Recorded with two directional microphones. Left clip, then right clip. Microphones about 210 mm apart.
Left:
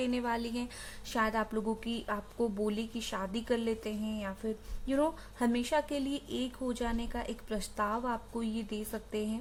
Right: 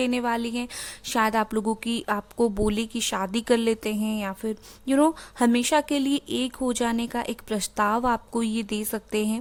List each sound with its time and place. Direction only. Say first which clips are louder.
0.0 s speech: right 8 dB; 35° right (ahead or behind)
1.0 s a woman's voice: right 9 dB; 45° right (ahead or behind)